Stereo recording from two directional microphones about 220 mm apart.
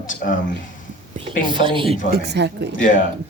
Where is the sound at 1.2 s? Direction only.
20° right (ahead or behind).